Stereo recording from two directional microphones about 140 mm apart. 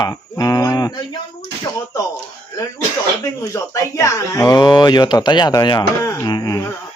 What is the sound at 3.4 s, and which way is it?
Speech, 20° left (ahead or behind).